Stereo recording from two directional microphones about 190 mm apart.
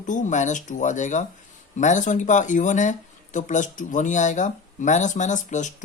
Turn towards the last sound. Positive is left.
turn(degrees=40)  # may be behind; listen again after turning